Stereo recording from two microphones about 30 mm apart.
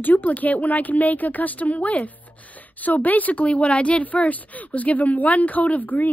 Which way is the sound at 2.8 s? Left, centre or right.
Left.